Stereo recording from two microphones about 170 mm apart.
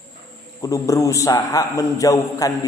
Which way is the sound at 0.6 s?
20° left (ahead or behind).